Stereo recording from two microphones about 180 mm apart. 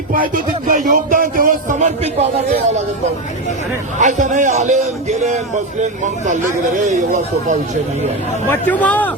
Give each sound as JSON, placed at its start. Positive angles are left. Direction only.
{"t": 0.7, "sound": "a man's voice", "side_deg": -50}
{"t": 3.9, "sound": "a man's voice", "side_deg": -45}
{"t": 6.2, "sound": "a man's voice", "side_deg": -45}
{"t": 8.4, "sound": "speech", "side_deg": 10}